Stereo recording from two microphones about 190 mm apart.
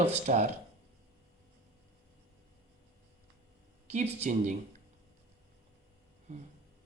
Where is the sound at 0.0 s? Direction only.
35° right (ahead or behind).